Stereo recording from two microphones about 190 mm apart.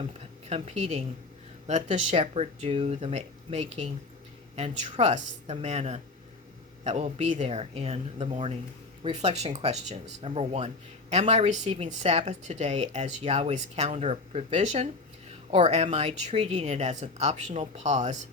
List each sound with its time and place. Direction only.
0.0 s speech: 30° right (ahead or behind)